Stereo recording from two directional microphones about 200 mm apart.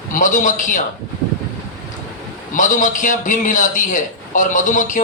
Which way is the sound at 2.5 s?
40° left (ahead or behind).